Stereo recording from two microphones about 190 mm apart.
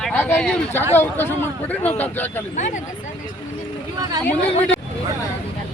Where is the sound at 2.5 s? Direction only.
40° left (ahead or behind).